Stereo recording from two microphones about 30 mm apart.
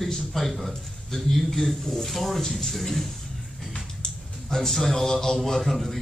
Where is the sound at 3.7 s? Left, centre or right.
Centre.